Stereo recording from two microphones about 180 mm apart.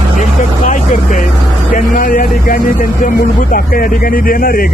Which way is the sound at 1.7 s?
50° left (ahead or behind).